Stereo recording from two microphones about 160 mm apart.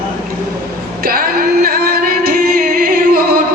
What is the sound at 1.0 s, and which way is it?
Music, 65° right (ahead or behind).